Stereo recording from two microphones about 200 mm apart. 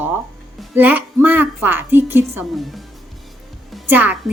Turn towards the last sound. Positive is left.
turn(degrees=-10)  # may be behind; listen again after turning